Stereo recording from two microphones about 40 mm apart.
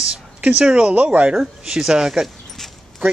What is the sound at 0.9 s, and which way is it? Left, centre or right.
Speech, right.